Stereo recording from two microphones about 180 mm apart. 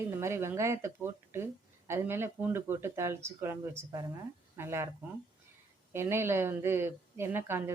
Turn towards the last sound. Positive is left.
turn(degrees=-10)  # may be behind; listen again after turning